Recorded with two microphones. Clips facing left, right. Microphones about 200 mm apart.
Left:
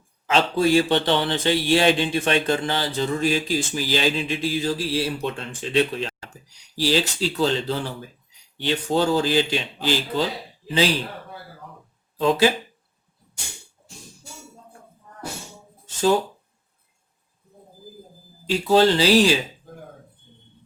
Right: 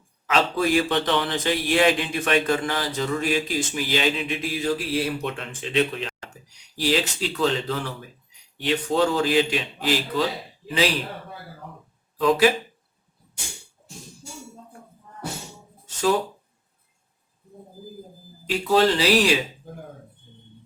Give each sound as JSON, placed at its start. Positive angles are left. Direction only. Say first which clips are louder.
{"t": 0.3, "sound": "a man's voice", "louder": "left 3 dB", "side_deg": 30}
{"t": 9.0, "sound": "a man's voice", "louder": "left 1 dB", "side_deg": 30}
{"t": 18.4, "sound": "a man's voice", "louder": "left 2 dB", "side_deg": 30}